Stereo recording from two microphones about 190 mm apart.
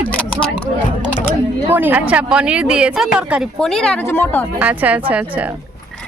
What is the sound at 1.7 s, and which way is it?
Speech, 10° right (ahead or behind).